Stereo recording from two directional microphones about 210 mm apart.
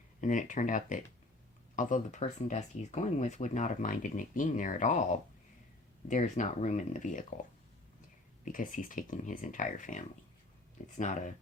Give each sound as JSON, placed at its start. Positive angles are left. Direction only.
{"t": 0.2, "sound": "speech", "side_deg": 40}
{"t": 8.4, "sound": "speech", "side_deg": 40}